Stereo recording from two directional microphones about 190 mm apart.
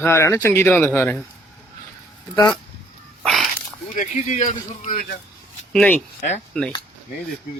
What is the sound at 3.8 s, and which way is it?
Speech, 40° left (ahead or behind).